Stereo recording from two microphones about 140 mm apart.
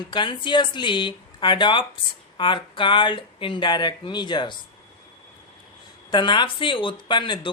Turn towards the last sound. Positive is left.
turn(degrees=35)  # may be behind; listen again after turning